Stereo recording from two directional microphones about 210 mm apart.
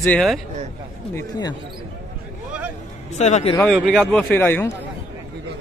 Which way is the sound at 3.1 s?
35° left (ahead or behind).